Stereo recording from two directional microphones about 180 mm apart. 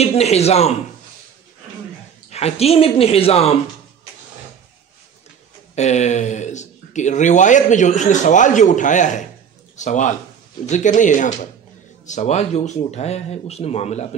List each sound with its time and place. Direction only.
0.0 s a man's voice: 35° left (ahead or behind)
2.3 s speech: 35° left (ahead or behind)
5.8 s speech: 40° left (ahead or behind)